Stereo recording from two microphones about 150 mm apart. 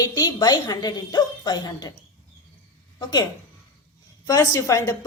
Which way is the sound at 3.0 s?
25° left (ahead or behind).